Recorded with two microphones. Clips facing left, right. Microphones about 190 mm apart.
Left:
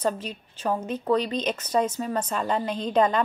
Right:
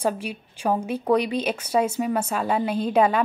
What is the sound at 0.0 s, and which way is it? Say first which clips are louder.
A woman's voice: right 2 dB; 10° right (ahead or behind).